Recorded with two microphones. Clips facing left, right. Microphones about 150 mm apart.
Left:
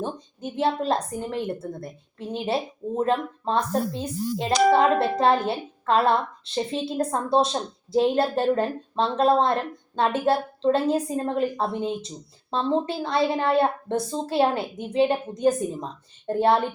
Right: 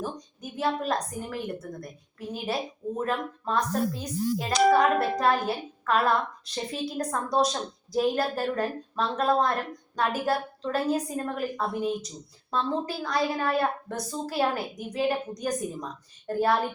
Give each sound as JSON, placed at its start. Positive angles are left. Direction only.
{"t": 0.0, "sound": "a woman's voice", "side_deg": 30}